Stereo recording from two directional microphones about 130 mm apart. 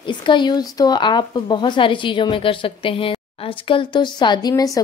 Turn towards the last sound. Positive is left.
turn(degrees=25)  # may be behind; listen again after turning